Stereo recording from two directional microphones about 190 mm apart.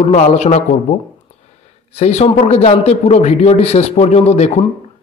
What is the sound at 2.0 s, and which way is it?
A man's voice, 35° left (ahead or behind).